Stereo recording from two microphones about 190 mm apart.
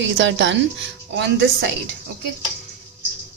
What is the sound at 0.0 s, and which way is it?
A woman's voice, 75° right (ahead or behind).